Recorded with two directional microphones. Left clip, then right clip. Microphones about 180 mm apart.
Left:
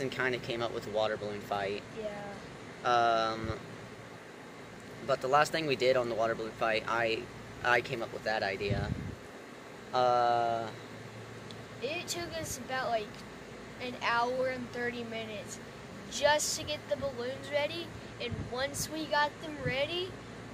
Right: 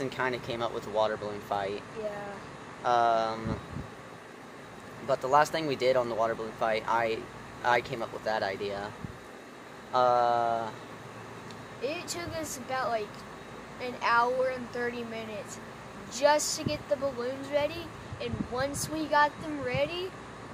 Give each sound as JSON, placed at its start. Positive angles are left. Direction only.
{"t": 0.0, "sound": "speech", "side_deg": 0}
{"t": 2.8, "sound": "speech", "side_deg": 0}
{"t": 5.0, "sound": "speech", "side_deg": 0}
{"t": 9.9, "sound": "speech", "side_deg": 0}
{"t": 11.8, "sound": "a woman's voice", "side_deg": -25}